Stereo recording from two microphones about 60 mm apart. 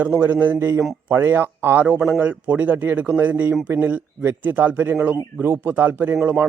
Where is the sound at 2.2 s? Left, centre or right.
Right.